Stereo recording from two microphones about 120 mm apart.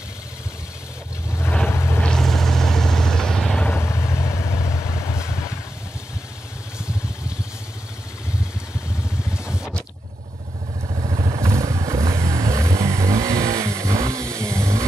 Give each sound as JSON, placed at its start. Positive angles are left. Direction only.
{"t": 1.4, "sound": "vehicle", "side_deg": 15}
{"t": 2.0, "sound": "vehicle", "side_deg": 5}
{"t": 9.5, "sound": "vehicle", "side_deg": -5}
{"t": 11.1, "sound": "motorcycle", "side_deg": -40}
{"t": 11.4, "sound": "vehicle", "side_deg": -25}